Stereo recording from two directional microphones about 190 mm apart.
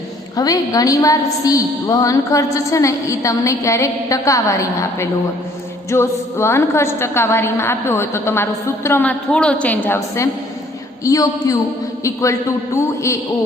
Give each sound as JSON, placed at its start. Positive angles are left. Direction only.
{"t": 0.3, "sound": "a woman's voice", "side_deg": 20}